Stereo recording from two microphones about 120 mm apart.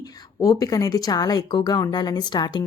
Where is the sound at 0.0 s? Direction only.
30° left (ahead or behind).